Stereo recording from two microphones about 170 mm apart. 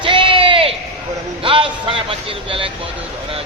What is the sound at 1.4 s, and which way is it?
Speech, 30° right (ahead or behind).